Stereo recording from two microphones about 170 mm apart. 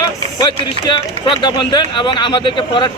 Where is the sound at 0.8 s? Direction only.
30° left (ahead or behind).